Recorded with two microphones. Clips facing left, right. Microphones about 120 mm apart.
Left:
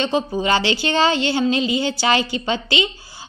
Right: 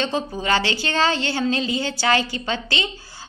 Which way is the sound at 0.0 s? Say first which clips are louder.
Left 4 dB; 20° left (ahead or behind).